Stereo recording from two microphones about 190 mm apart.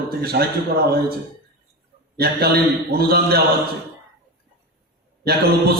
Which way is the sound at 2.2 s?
55° right (ahead or behind).